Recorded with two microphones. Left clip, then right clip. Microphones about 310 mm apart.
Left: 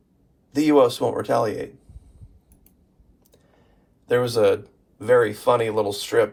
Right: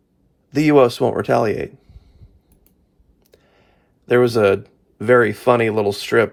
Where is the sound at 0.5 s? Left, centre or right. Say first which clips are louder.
Right 4 dB; right.